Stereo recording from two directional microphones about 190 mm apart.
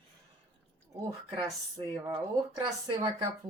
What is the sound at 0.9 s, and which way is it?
Speech, 20° right (ahead or behind).